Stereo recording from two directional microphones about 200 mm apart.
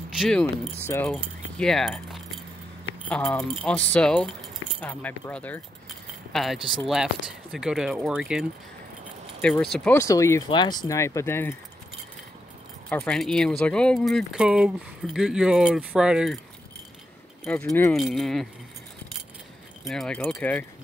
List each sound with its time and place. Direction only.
0.2 s speech: 5° left (ahead or behind)
1.1 s speech: centre (ahead or behind)
12.9 s speech: 5° left (ahead or behind)
17.5 s speech: 5° left (ahead or behind)
19.9 s speech: centre (ahead or behind)